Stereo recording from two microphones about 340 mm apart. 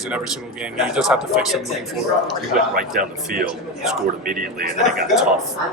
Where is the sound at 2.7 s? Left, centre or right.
Right.